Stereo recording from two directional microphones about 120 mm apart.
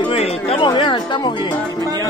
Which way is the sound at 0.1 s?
55° left (ahead or behind).